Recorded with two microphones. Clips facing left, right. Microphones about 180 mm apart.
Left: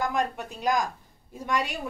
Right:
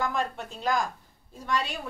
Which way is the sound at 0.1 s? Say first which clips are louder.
Left 2 dB; 15° left (ahead or behind).